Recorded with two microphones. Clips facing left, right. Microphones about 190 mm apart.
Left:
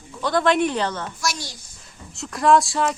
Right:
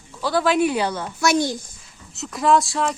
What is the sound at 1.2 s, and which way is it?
Speech, 55° right (ahead or behind).